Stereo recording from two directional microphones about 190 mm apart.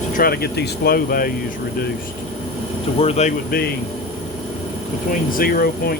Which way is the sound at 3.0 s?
35° left (ahead or behind).